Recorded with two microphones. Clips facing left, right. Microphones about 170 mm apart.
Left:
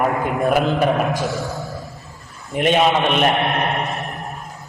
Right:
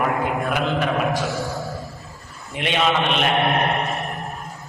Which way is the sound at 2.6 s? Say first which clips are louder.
Left 7 dB; 45° left (ahead or behind).